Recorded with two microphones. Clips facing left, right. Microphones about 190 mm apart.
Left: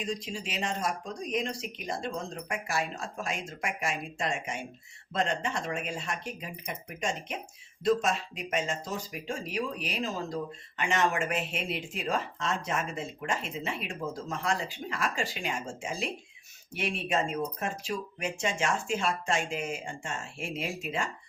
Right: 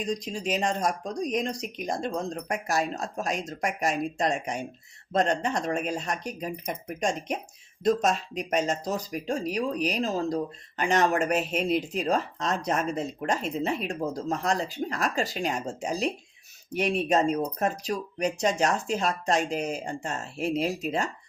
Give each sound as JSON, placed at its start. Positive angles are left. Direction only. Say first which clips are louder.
{"t": 0.0, "sound": "speech", "louder": "right 5 dB", "side_deg": -40}